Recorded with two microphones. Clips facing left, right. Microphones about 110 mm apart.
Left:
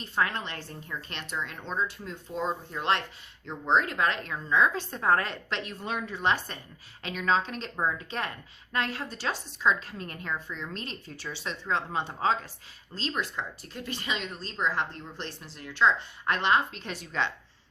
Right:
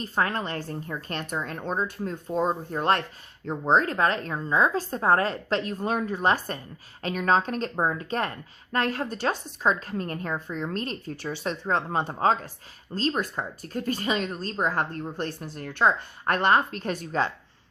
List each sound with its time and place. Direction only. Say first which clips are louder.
0.0 s speech: right 3 dB; 40° right (ahead or behind)